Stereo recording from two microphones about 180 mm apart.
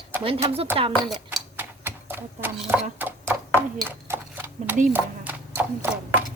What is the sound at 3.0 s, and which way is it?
Horse, 10° right (ahead or behind).